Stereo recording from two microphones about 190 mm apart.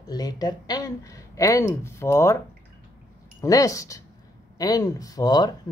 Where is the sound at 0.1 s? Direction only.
20° left (ahead or behind).